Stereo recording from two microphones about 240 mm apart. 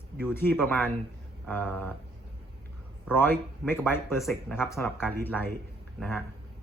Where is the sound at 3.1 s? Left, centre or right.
Centre.